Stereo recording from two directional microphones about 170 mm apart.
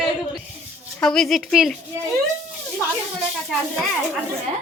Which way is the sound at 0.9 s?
5° left (ahead or behind).